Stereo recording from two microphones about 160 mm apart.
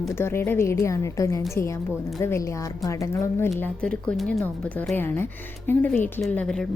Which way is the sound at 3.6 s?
10° left (ahead or behind).